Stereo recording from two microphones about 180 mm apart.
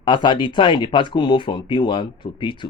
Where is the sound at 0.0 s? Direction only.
25° left (ahead or behind).